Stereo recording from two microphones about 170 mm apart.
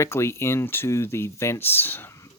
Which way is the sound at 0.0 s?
15° left (ahead or behind).